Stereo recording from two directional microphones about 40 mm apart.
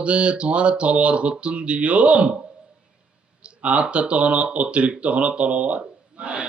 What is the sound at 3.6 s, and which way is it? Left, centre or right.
A man's voice, right.